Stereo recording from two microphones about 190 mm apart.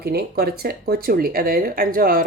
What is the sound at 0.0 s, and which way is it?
Speech, 55° right (ahead or behind).